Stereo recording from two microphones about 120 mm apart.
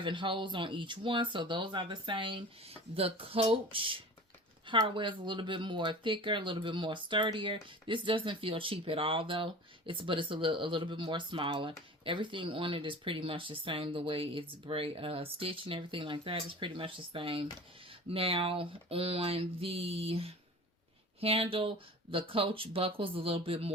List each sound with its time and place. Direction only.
0.0 s speech: 45° right (ahead or behind)